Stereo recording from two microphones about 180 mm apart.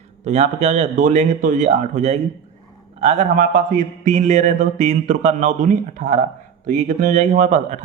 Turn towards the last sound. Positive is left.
turn(degrees=-40)  # may be behind; listen again after turning